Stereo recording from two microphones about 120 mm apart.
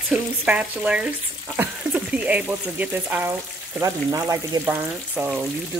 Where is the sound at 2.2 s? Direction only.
10° right (ahead or behind).